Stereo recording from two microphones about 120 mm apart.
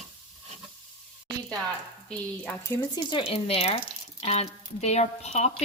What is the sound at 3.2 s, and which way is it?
Speech, 55° left (ahead or behind).